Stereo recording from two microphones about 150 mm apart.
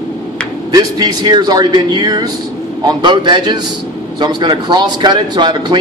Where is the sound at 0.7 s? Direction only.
25° right (ahead or behind).